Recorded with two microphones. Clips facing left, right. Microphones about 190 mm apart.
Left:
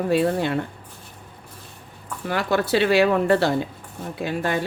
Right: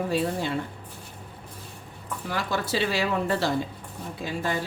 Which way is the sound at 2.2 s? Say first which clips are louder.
Left 7 dB; 65° left (ahead or behind).